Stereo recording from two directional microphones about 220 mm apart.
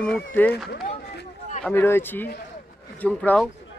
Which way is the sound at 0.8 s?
35° left (ahead or behind).